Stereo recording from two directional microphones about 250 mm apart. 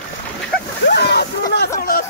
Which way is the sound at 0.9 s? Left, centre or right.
Left.